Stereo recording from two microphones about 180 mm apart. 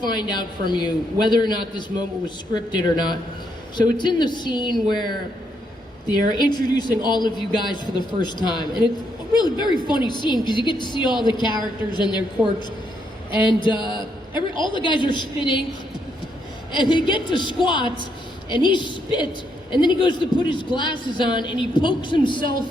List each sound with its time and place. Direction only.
0.0 s a man's voice: 25° left (ahead or behind)
6.3 s a man's voice: 25° left (ahead or behind)
12.4 s a woman's voice: 10° right (ahead or behind)
13.4 s a man's voice: 25° left (ahead or behind)
16.7 s a man's voice: 25° left (ahead or behind)